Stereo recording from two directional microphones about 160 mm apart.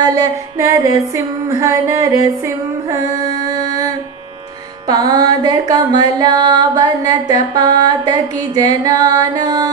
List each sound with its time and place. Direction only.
0.0 s music: 25° right (ahead or behind)